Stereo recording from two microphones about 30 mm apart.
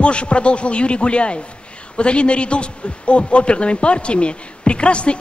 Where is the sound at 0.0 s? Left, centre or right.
Left.